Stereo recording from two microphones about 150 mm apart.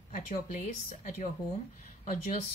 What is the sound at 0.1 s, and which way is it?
A woman's voice, 60° left (ahead or behind).